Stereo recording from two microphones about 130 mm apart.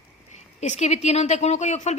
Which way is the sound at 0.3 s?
65° left (ahead or behind).